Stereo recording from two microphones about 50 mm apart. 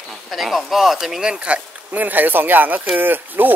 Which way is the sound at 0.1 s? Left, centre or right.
Centre.